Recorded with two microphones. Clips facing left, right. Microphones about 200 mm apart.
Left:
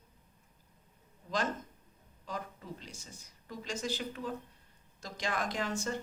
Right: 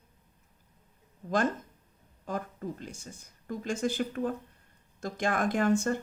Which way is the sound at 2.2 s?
50° right (ahead or behind).